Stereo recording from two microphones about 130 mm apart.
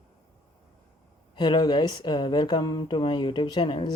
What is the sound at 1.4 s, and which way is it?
Speech, 35° left (ahead or behind).